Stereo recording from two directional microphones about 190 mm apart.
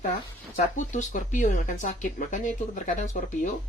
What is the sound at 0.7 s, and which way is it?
Speech, 40° left (ahead or behind).